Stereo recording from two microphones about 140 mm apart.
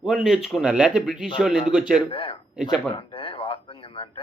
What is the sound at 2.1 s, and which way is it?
Speech, 40° left (ahead or behind).